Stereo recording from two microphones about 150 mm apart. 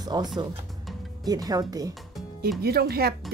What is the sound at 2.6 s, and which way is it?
Speech, 90° right.